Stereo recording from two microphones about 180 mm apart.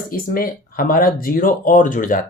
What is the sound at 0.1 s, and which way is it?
Speech, 55° left (ahead or behind).